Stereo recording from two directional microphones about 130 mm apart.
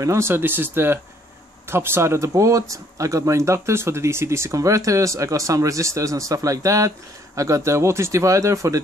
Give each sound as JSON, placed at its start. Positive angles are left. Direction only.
{"t": 0.0, "sound": "speech", "side_deg": -20}